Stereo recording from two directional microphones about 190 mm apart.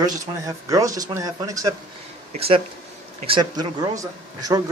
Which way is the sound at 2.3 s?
30° right (ahead or behind).